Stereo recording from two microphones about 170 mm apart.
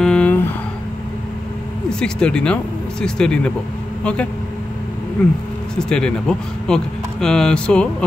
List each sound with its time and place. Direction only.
0.0 s a sound: 5° left (ahead or behind)
1.9 s speech: 5° left (ahead or behind)
5.8 s speech: 5° left (ahead or behind)